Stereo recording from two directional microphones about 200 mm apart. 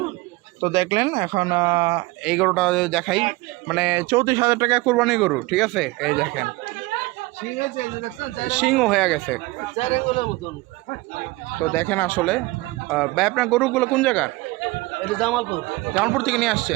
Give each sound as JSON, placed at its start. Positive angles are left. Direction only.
{"t": 0.6, "sound": "speech", "side_deg": -15}
{"t": 2.2, "sound": "a man's voice", "side_deg": -5}
{"t": 8.6, "sound": "a man's voice", "side_deg": 0}
{"t": 9.7, "sound": "speech", "side_deg": 30}
{"t": 11.7, "sound": "a man's voice", "side_deg": 10}